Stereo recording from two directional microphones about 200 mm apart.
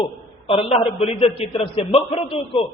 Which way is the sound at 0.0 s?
25° left (ahead or behind).